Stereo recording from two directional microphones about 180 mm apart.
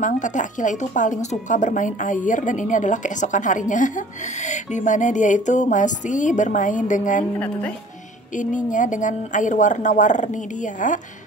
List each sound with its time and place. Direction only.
0.0 s a woman's voice: 45° left (ahead or behind)
7.3 s speech: 5° left (ahead or behind)
8.4 s a woman's voice: 45° left (ahead or behind)